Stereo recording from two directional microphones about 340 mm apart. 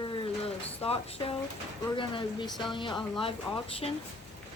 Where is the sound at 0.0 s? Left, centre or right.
Centre.